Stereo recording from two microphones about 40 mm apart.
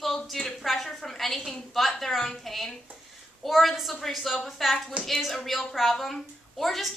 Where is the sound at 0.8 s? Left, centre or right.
Centre.